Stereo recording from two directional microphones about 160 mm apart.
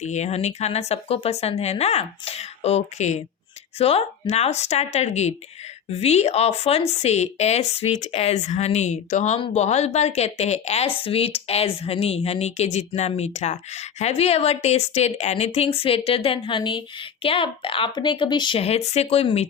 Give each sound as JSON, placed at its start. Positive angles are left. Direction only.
{"t": 0.0, "sound": "a woman's voice", "side_deg": 45}